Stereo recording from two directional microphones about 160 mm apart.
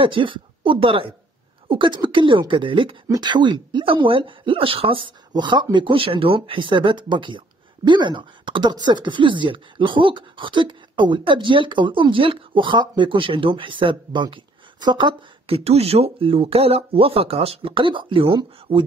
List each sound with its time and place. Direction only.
0.0 s speech: 30° right (ahead or behind)